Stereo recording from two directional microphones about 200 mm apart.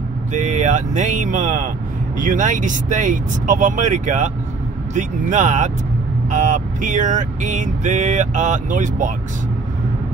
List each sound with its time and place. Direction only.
0.3 s music: 40° right (ahead or behind)